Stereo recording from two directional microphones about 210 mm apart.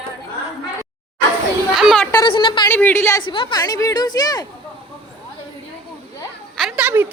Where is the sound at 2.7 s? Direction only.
10° left (ahead or behind).